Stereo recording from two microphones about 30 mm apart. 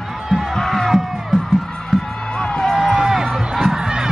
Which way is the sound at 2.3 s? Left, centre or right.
Left.